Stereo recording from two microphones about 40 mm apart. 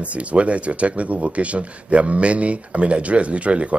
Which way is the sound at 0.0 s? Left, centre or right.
Right.